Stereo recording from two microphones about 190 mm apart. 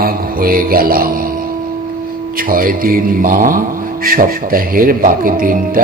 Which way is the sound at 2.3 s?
50° right (ahead or behind).